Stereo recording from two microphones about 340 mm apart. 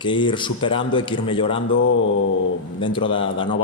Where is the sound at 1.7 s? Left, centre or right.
Left.